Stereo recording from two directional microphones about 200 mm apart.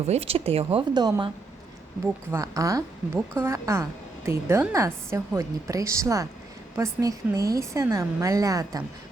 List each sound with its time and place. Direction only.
0.1 s speech: 30° right (ahead or behind)
2.3 s a woman's voice: 15° right (ahead or behind)